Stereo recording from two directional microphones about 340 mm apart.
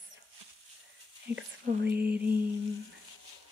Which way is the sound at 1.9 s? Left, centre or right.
Centre.